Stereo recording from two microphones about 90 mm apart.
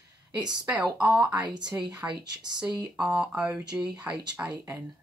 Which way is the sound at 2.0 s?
20° right (ahead or behind).